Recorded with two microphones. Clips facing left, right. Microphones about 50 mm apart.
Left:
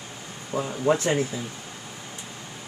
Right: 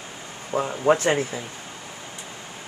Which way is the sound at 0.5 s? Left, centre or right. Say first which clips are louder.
Right 3 dB; right.